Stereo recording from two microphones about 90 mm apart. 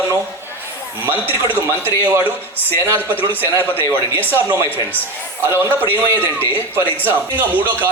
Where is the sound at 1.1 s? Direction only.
25° right (ahead or behind).